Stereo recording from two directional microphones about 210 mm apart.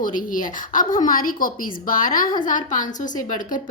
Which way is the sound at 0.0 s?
40° left (ahead or behind).